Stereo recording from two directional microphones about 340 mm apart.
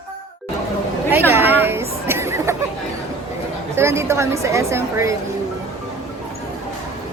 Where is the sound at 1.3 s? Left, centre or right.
Centre.